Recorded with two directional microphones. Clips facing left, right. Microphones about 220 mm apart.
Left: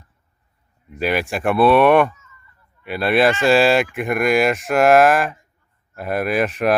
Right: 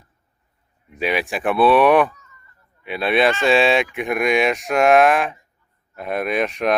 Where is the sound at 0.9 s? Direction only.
Centre (ahead or behind).